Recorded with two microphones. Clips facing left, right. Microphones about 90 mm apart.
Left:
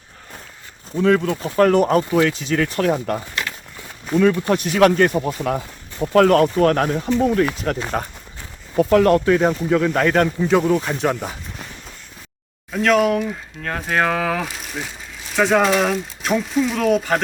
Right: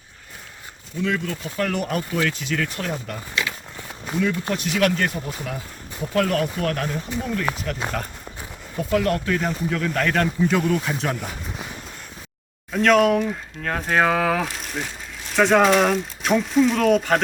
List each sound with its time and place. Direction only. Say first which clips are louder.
0.9 s speech: left 8 dB; 45° left (ahead or behind)
2.0 s speech: left 6 dB; 25° left (ahead or behind)
2.9 s speech: left 6 dB; 45° left (ahead or behind)
5.1 s speech: left 9 dB; 60° left (ahead or behind)
8.8 s speech: left 7 dB; 55° left (ahead or behind)
9.1 s speech: left 8 dB; 35° left (ahead or behind)
9.6 s speech: left 6 dB; 25° left (ahead or behind)
10.1 s a man's voice: left 2 dB; 10° left (ahead or behind)
10.8 s speech: left 4 dB; 5° left (ahead or behind)
12.7 s speech: even; centre (ahead or behind)